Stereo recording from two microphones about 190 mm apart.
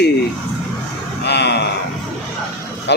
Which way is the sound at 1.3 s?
60° left (ahead or behind).